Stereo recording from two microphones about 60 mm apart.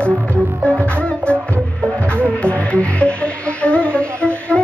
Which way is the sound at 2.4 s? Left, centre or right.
Centre.